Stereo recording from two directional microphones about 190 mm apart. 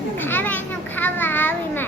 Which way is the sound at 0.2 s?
10° left (ahead or behind).